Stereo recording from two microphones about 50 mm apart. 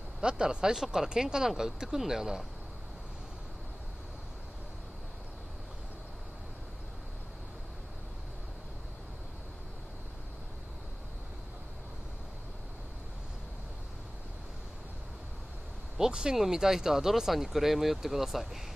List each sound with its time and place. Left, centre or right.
0.2 s speech: centre
16.0 s speech: centre